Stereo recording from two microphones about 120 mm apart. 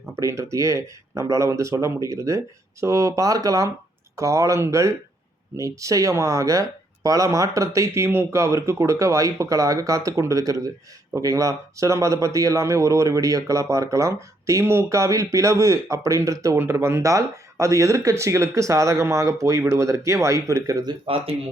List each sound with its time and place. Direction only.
0.2 s speech: 25° right (ahead or behind)